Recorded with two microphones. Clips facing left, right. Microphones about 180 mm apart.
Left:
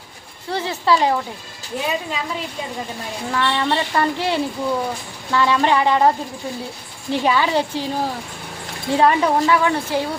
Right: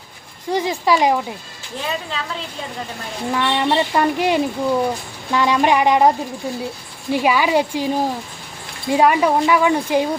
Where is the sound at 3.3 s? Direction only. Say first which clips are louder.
Right 2 dB; 15° right (ahead or behind).